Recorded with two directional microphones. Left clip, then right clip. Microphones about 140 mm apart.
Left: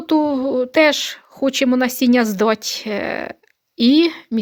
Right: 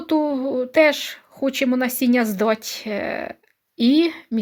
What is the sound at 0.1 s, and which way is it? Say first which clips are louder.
Speech: left 4 dB; 40° left (ahead or behind).